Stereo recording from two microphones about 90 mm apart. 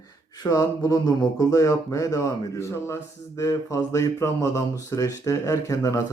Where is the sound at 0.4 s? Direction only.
45° left (ahead or behind).